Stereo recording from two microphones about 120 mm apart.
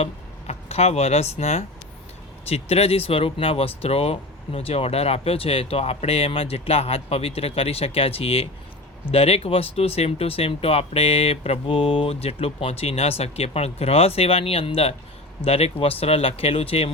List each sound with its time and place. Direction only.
0.0 s speech: 60° left (ahead or behind)